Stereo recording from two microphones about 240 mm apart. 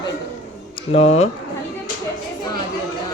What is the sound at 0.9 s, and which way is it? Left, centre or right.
Speech, left.